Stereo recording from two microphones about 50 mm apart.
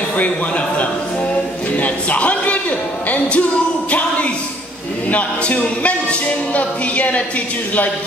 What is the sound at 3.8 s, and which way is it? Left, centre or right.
A capella, left.